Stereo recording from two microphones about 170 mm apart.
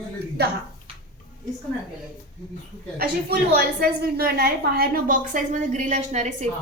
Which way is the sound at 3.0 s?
65° right (ahead or behind).